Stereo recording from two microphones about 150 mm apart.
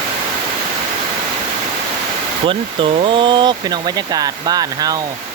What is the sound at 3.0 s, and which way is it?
Speech, 35° right (ahead or behind).